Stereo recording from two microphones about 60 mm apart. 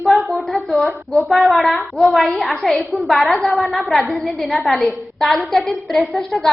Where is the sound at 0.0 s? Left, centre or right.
Centre.